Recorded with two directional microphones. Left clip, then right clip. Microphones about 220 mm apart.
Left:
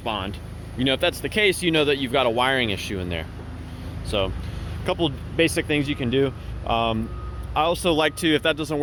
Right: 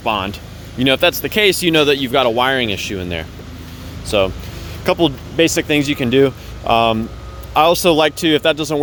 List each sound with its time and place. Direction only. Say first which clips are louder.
0.0 s speech: right 9 dB; 30° right (ahead or behind)